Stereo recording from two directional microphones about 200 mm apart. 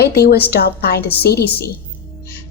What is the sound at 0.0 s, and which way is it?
A woman's voice, 55° left (ahead or behind).